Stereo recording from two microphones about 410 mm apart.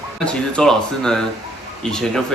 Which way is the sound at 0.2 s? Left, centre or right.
Centre.